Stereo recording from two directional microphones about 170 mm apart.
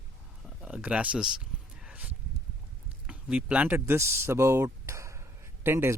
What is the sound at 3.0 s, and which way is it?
Speech, 5° right (ahead or behind).